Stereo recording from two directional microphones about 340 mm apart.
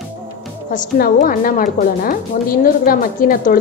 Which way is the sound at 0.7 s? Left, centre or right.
Left.